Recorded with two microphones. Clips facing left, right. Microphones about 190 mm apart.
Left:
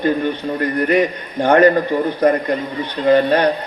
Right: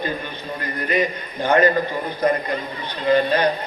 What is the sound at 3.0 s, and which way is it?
Speech, 60° left (ahead or behind).